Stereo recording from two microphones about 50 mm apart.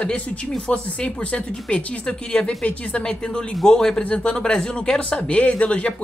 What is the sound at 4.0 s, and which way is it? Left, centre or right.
Speech, left.